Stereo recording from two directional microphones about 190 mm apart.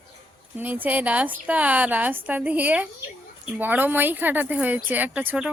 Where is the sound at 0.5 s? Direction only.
10° right (ahead or behind).